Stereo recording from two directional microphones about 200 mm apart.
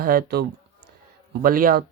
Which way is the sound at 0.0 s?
50° right (ahead or behind).